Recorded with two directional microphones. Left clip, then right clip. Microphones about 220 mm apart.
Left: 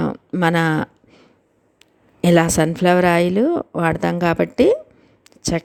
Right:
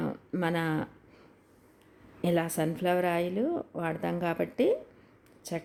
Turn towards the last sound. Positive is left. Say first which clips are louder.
# left 14 dB
turn(degrees=40)  # may be behind; listen again after turning